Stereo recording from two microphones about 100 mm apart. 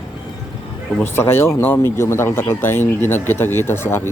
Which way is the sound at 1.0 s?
25° left (ahead or behind).